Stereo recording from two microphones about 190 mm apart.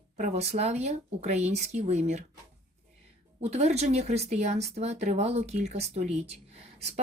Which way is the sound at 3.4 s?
35° right (ahead or behind).